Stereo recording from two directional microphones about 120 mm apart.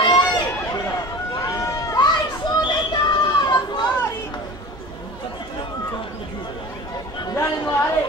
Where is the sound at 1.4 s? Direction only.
30° left (ahead or behind).